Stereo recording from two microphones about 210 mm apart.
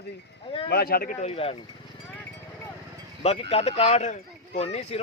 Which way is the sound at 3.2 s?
30° left (ahead or behind).